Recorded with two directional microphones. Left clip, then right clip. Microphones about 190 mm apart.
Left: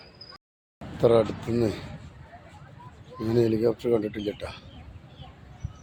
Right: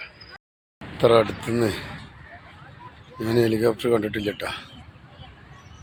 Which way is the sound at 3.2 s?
Centre (ahead or behind).